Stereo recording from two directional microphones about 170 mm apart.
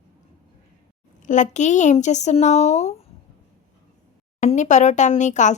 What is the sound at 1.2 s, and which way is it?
Speech, 45° left (ahead or behind).